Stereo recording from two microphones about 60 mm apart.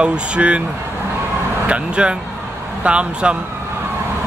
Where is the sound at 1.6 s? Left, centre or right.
Centre.